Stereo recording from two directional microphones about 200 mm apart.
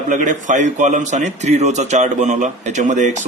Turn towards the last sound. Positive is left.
turn(degrees=-35)  # may be behind; listen again after turning